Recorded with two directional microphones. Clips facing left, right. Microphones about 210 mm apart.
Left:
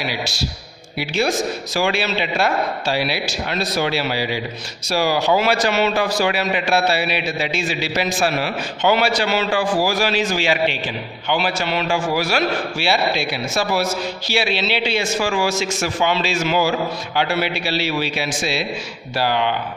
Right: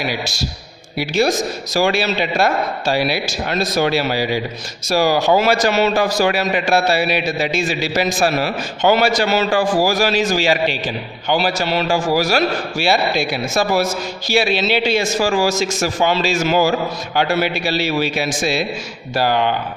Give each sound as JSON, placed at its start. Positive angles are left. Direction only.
{"t": 0.0, "sound": "a man's voice", "side_deg": -45}